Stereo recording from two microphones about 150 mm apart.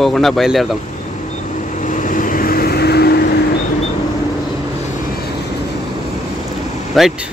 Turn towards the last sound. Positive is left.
turn(degrees=0)  # may be behind; listen again after turning